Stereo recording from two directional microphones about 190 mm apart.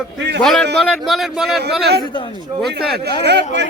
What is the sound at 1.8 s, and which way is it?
Speech, 60° right (ahead or behind).